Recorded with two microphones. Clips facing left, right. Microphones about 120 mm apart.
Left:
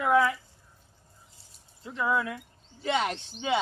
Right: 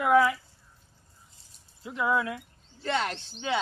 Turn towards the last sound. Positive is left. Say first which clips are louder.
# left 2 dB
turn(degrees=5)  # may be behind; listen again after turning